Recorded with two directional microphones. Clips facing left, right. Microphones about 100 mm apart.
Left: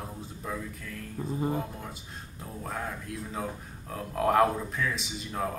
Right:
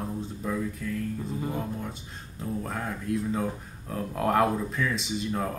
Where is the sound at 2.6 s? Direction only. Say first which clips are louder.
Right 3 dB; centre (ahead or behind).